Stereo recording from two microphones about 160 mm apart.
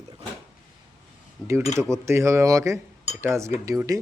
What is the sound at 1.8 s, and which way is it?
A man's voice, 15° right (ahead or behind).